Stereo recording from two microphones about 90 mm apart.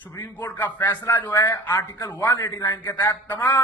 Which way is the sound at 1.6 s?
50° left (ahead or behind).